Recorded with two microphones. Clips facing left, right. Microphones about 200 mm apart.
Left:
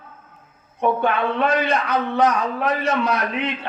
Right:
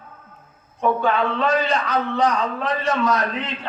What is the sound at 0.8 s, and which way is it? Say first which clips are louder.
Speech: even; 60° left (ahead or behind).